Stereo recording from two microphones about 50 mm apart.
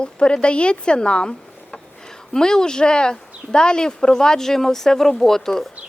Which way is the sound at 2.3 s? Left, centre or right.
Centre.